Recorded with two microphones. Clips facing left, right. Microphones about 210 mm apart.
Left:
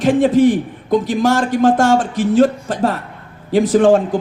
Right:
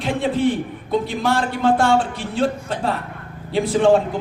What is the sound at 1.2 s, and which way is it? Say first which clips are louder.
A man's voice: left 6 dB; 45° left (ahead or behind).